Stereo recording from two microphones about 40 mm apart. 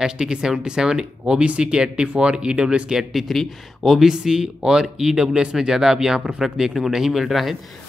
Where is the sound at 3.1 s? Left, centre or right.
Centre.